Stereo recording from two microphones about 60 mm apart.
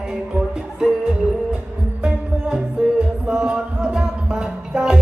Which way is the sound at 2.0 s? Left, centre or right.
Centre.